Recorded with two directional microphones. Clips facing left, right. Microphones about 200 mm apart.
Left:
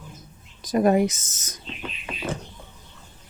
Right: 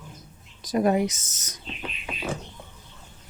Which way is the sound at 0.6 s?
50° left (ahead or behind).